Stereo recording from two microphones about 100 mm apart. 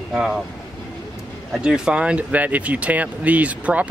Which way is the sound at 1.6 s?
10° right (ahead or behind).